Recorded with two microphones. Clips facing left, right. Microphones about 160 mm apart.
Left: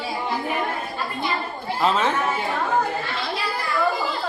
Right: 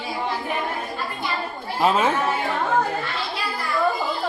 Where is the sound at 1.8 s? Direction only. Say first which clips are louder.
Right 2 dB; 10° right (ahead or behind).